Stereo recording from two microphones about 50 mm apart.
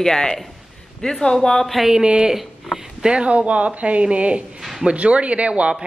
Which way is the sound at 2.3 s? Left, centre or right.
Centre.